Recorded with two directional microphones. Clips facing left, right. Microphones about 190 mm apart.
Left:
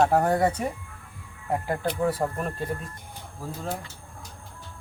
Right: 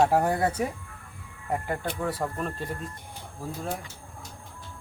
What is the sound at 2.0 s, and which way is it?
Speech, 10° left (ahead or behind).